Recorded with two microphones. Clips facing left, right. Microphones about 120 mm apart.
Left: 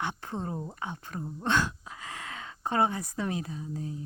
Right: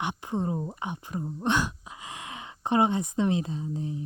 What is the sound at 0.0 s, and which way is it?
Speech, 15° right (ahead or behind).